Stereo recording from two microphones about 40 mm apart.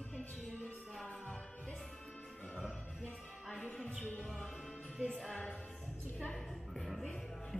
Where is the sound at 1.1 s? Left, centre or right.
Left.